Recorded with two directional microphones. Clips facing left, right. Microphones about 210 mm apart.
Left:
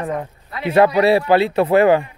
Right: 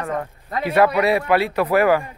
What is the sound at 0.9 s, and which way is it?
Speech, 30° left (ahead or behind).